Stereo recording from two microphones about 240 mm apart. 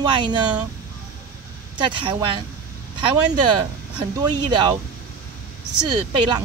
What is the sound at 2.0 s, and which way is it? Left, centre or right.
Speech, centre.